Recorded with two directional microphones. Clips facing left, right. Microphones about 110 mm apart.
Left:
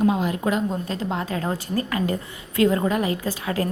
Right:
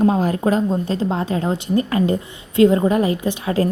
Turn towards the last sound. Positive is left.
turn(degrees=-25)  # may be behind; listen again after turning